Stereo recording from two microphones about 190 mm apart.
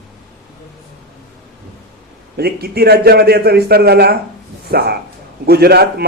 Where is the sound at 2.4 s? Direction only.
55° right (ahead or behind).